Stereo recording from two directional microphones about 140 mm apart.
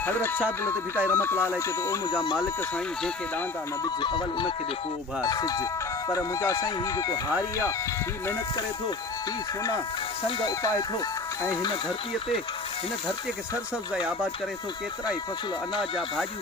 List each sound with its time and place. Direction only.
0.0 s speech: 15° left (ahead or behind)
3.8 s music: 30° left (ahead or behind)
5.2 s speech: 25° left (ahead or behind)
10.2 s speech: 25° left (ahead or behind)
15.8 s speech: centre (ahead or behind)